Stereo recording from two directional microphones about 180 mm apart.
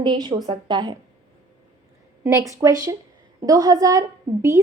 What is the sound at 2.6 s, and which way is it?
Speech, 20° right (ahead or behind).